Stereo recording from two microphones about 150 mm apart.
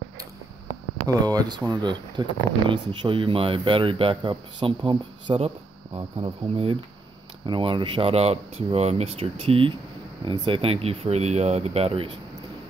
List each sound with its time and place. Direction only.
1.0 s speech: 25° right (ahead or behind); by 12.1 s 40° right (ahead or behind)